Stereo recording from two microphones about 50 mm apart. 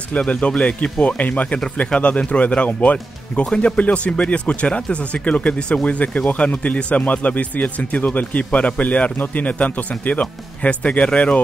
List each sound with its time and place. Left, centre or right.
0.1 s speech: left